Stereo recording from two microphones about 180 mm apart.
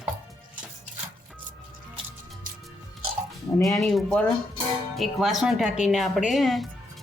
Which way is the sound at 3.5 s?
Centre (ahead or behind).